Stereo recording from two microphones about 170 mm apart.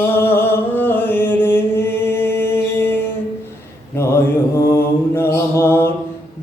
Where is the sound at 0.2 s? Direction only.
15° left (ahead or behind).